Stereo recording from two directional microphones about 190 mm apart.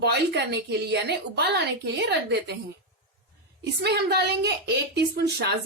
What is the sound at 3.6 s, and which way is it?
Speech, 60° right (ahead or behind).